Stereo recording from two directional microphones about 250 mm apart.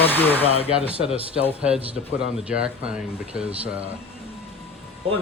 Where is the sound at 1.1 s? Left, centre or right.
Right.